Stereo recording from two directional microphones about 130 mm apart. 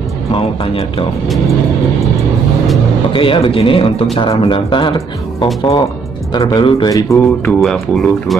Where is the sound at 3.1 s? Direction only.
40° left (ahead or behind).